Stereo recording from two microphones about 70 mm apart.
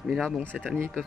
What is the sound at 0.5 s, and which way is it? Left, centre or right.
Speech, centre.